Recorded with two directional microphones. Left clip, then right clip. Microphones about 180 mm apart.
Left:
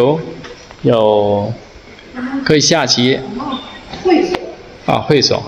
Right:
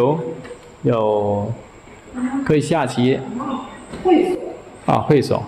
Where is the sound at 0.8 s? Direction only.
15° left (ahead or behind).